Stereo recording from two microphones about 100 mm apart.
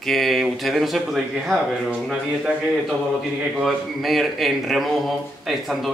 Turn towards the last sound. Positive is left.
turn(degrees=-5)  # may be behind; listen again after turning